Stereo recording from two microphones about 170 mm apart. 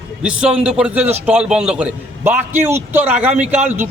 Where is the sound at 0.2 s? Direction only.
5° right (ahead or behind).